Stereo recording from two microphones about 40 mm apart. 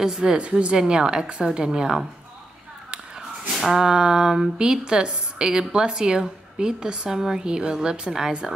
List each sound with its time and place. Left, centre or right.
0.0 s speech: centre
0.4 s a woman's voice: right
3.4 s speech: centre